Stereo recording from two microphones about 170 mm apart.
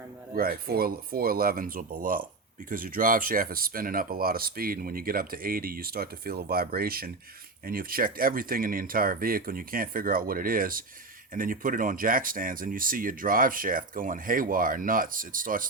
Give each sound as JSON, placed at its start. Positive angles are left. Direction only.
{"t": 0.3, "sound": "speech", "side_deg": -60}